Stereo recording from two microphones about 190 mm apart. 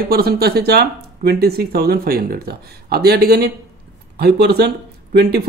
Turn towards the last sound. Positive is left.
turn(degrees=-55)  # may be behind; listen again after turning